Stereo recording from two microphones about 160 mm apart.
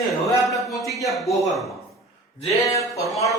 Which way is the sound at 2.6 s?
20° left (ahead or behind).